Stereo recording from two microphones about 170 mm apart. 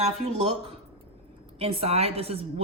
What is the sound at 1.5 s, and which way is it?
Speech, 35° right (ahead or behind).